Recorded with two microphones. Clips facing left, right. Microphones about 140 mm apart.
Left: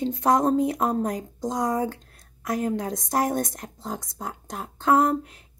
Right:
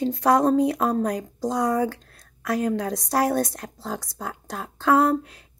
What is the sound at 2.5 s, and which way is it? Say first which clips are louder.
Speech: right 2 dB; 20° left (ahead or behind).